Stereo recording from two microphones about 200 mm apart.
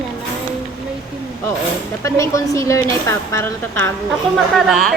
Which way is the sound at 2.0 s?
15° left (ahead or behind).